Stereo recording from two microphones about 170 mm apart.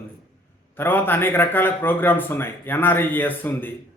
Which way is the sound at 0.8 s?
10° left (ahead or behind).